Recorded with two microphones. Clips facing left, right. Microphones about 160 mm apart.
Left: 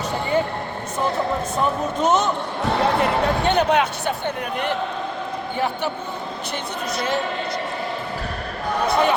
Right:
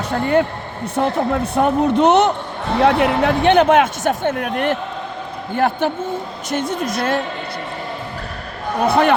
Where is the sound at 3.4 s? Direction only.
50° right (ahead or behind).